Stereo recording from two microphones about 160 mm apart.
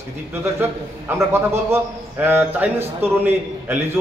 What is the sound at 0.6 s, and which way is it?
A man's voice, 15° right (ahead or behind).